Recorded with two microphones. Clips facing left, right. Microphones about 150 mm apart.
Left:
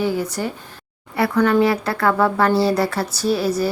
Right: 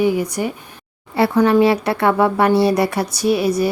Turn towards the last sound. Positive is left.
turn(degrees=-15)  # may be behind; listen again after turning